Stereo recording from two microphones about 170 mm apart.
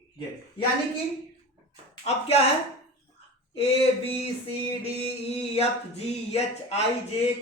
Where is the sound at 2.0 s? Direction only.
35° left (ahead or behind).